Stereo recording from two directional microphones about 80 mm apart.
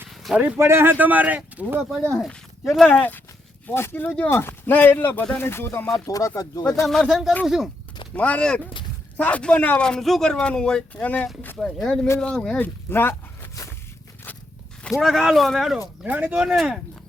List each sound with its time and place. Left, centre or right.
0.1 s a sound: centre
0.3 s speech: right
2.6 s speech: centre
3.7 s speech: left
4.0 s speech: centre
4.3 s speech: left
6.1 s speech: left
6.8 s speech: centre
8.1 s speech: centre
11.5 s speech: centre
12.5 s speech: left
14.3 s walk: left
14.8 s speech: centre
16.0 s speech: centre